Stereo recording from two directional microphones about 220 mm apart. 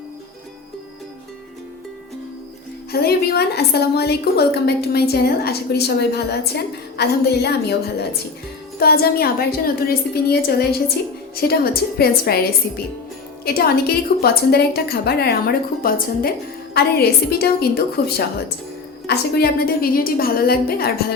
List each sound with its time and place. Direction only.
2.9 s a woman's voice: 45° left (ahead or behind)
19.0 s a woman's voice: 45° left (ahead or behind)